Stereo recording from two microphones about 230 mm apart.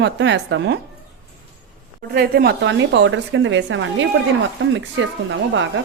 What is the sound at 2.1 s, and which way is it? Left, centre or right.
A woman's voice, right.